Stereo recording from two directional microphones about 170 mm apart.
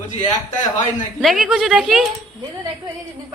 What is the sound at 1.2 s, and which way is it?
Speech, centre (ahead or behind).